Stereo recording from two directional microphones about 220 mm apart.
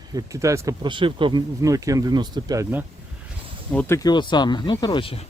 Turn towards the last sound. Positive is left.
turn(degrees=25)  # may be behind; listen again after turning